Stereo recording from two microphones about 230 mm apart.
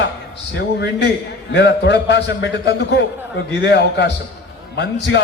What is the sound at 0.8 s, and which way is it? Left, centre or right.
A man's voice, left.